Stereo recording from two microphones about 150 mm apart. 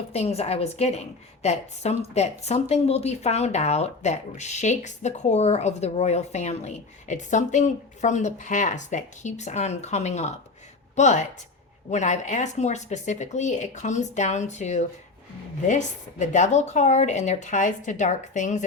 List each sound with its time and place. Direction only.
0.1 s speech: 45° left (ahead or behind)